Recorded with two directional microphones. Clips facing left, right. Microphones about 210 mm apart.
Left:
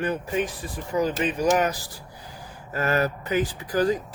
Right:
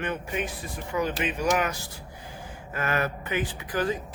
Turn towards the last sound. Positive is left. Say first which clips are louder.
# left 5 dB
turn(degrees=40)  # may be behind; listen again after turning